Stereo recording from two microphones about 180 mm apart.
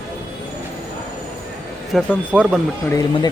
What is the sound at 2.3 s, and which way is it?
Speech, 5° right (ahead or behind).